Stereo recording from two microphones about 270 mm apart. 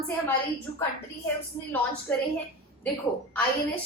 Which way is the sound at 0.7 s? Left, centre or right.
Centre.